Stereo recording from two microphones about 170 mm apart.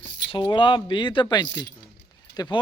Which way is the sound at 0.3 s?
30° left (ahead or behind).